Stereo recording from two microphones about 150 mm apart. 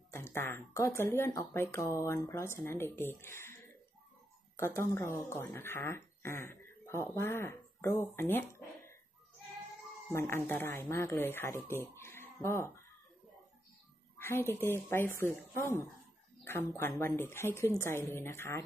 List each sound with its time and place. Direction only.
0.1 s speech: 15° left (ahead or behind)
4.6 s speech: 15° left (ahead or behind)
10.1 s speech: 15° left (ahead or behind)
14.1 s speech: 15° left (ahead or behind)